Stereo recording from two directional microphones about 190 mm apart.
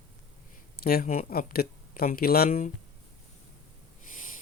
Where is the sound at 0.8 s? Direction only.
50° left (ahead or behind).